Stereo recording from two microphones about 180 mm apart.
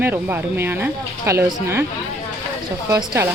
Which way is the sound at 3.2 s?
15° right (ahead or behind).